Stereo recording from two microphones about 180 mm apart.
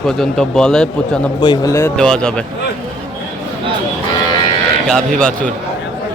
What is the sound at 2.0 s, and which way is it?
Speech, 5° left (ahead or behind).